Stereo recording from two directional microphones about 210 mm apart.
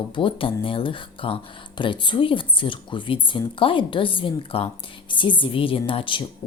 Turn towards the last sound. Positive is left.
turn(degrees=25)  # may be behind; listen again after turning